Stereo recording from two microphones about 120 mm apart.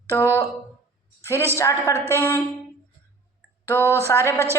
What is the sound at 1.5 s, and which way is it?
Speech, 25° left (ahead or behind).